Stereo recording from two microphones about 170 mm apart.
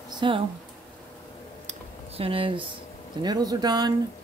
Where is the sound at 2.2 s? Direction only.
30° right (ahead or behind).